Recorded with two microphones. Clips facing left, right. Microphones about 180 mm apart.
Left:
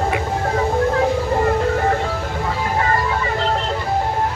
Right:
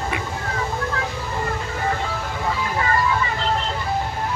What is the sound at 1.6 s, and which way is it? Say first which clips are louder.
Music: left 7 dB; 50° left (ahead or behind).